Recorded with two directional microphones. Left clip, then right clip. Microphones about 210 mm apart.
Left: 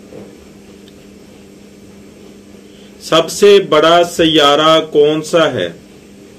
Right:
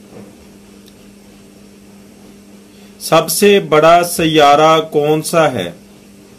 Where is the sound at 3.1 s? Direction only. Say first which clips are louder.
Left 2 dB; 45° right (ahead or behind).